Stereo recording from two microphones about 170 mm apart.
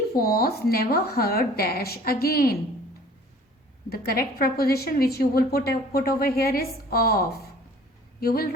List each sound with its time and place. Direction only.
0.2 s a woman's voice: 60° left (ahead or behind)
3.8 s a woman's voice: 60° left (ahead or behind)
8.2 s a woman's voice: 60° left (ahead or behind)